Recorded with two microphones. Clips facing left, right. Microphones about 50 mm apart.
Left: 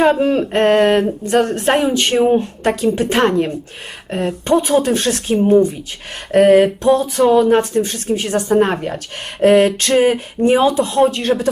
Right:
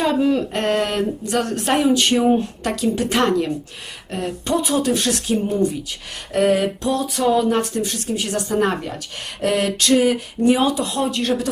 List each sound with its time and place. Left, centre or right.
0.0 s speech: left